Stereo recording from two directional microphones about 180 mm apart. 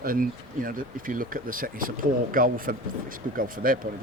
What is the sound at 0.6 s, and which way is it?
Speech, 50° right (ahead or behind).